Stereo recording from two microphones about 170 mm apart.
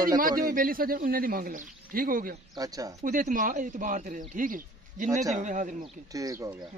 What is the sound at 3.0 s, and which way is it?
A man's voice, 50° right (ahead or behind).